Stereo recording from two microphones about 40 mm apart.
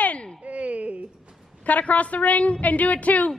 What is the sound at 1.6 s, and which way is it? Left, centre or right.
A woman's voice, left.